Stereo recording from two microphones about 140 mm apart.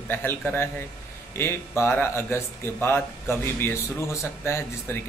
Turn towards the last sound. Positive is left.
turn(degrees=15)  # may be behind; listen again after turning